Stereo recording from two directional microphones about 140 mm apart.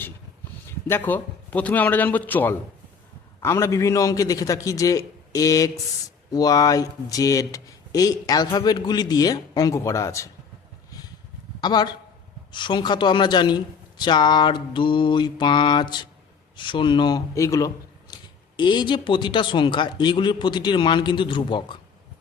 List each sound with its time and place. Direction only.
0.7 s a man's voice: 15° left (ahead or behind)
11.6 s a man's voice: 30° left (ahead or behind)
18.1 s speech: 35° left (ahead or behind)